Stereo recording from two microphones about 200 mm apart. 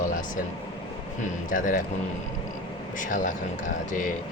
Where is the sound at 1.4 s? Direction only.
40° left (ahead or behind).